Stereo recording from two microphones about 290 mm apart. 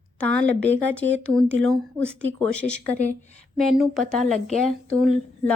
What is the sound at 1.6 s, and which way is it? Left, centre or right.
Speech, centre.